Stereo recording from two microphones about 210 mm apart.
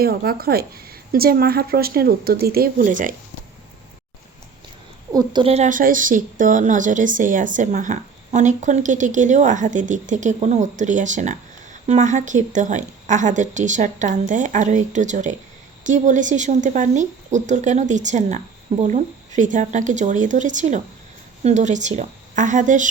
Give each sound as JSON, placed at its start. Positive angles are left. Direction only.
{"t": 0.0, "sound": "a woman's voice", "side_deg": -45}
{"t": 5.1, "sound": "speech", "side_deg": -25}